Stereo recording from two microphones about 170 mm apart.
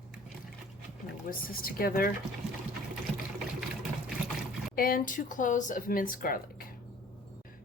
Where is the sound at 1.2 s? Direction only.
55° left (ahead or behind).